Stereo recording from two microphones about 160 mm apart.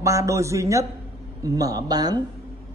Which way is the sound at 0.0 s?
20° right (ahead or behind).